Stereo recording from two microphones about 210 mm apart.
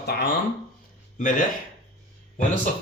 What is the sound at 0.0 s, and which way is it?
Speech, 50° left (ahead or behind).